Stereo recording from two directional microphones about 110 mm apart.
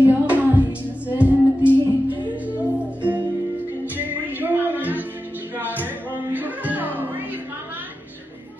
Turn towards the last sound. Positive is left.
turn(degrees=-15)  # may be behind; listen again after turning